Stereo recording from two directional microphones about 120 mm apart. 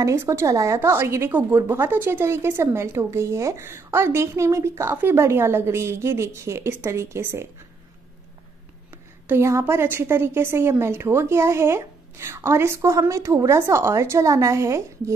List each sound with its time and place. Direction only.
0.0 s a woman's voice: 25° right (ahead or behind)
9.3 s a woman's voice: 20° right (ahead or behind)